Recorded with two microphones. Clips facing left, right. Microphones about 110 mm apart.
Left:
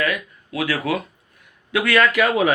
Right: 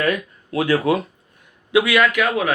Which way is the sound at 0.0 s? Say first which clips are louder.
Right 3 dB; 30° right (ahead or behind).